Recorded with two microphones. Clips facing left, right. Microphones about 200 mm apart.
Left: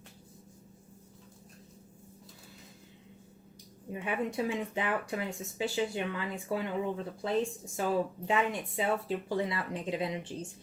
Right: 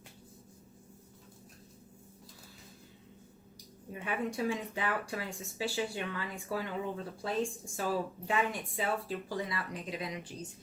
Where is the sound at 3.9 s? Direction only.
20° left (ahead or behind).